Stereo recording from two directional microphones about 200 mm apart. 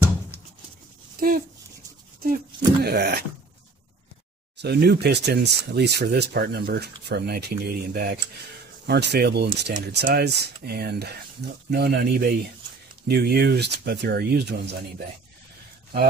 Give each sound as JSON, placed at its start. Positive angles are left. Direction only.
{"t": 2.2, "sound": "speech", "side_deg": -50}
{"t": 4.6, "sound": "speech", "side_deg": -55}